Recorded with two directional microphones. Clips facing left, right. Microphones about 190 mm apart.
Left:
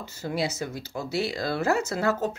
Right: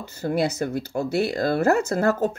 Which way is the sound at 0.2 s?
55° right (ahead or behind).